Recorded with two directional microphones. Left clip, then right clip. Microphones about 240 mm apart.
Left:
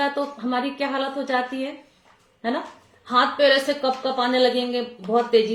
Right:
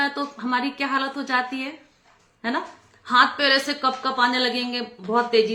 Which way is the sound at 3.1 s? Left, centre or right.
Centre.